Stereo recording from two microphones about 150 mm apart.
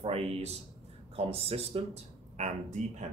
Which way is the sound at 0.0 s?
40° right (ahead or behind).